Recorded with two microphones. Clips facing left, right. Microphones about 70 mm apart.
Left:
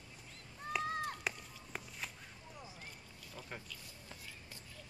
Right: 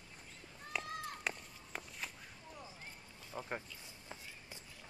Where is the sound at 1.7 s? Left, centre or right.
Centre.